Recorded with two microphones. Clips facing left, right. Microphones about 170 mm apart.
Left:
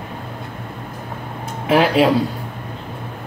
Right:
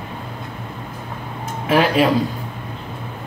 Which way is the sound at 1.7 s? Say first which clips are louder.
Left 1 dB; 15° left (ahead or behind).